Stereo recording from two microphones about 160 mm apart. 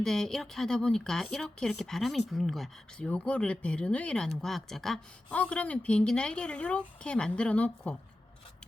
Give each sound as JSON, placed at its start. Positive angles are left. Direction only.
{"t": 0.0, "sound": "a woman's voice", "side_deg": 5}